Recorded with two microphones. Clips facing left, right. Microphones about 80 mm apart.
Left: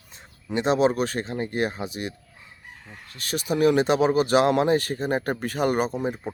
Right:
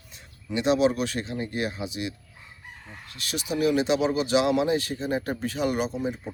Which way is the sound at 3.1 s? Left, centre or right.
Left.